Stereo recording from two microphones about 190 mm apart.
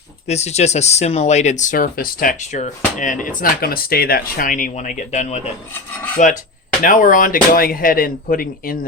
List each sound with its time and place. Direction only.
0.3 s speech: 35° left (ahead or behind)